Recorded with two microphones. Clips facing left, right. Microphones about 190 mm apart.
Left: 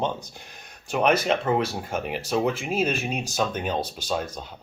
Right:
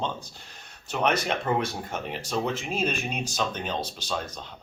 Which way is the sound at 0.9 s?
10° left (ahead or behind).